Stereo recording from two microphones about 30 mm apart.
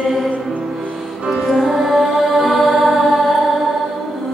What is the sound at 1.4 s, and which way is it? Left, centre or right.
Music, centre.